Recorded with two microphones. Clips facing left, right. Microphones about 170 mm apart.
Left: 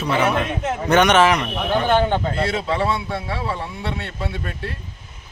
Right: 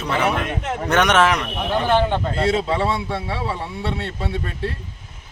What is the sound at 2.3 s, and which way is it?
A man's voice, 25° right (ahead or behind).